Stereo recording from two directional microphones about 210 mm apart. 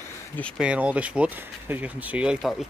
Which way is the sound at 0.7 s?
5° right (ahead or behind).